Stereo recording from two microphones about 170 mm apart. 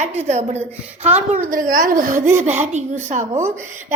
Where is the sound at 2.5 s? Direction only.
40° right (ahead or behind).